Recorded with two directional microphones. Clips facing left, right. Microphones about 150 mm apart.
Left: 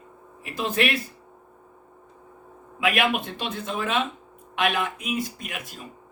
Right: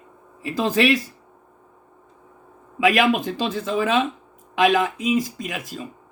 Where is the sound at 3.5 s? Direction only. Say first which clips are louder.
Right 5 dB; 90° right.